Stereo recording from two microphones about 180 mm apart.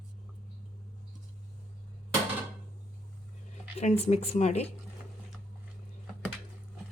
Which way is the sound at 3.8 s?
35° left (ahead or behind).